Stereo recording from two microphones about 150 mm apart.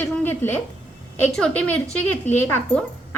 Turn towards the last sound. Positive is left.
turn(degrees=15)  # may be behind; listen again after turning